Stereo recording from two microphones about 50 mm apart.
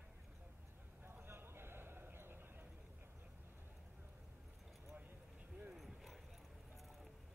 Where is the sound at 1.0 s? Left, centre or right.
Right.